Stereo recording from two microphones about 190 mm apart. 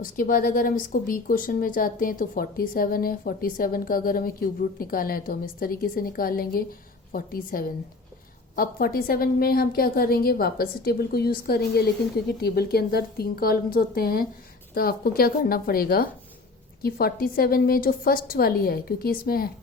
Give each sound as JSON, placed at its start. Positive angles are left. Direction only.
{"t": 0.0, "sound": "speech", "side_deg": 45}